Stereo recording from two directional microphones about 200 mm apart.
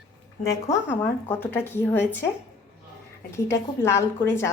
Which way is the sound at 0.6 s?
10° left (ahead or behind).